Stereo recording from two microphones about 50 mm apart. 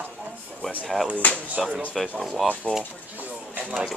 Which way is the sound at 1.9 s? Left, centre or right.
Centre.